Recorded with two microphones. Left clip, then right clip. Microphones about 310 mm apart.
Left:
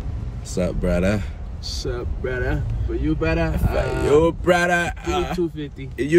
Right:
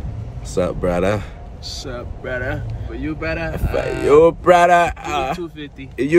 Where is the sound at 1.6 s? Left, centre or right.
Centre.